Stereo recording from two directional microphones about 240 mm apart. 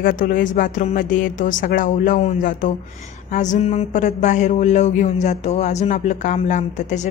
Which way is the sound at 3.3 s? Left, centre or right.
Left.